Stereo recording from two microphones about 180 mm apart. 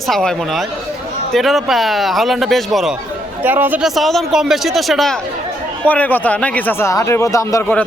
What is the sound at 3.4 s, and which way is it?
Speech, 10° right (ahead or behind).